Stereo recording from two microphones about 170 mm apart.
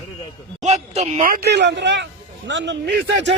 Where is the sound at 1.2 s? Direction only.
60° right (ahead or behind); by 2.9 s 90° right.